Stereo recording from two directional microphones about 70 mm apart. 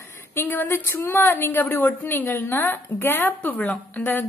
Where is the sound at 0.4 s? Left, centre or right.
Left.